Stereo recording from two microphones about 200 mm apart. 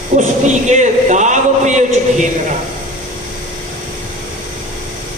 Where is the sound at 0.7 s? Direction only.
35° right (ahead or behind).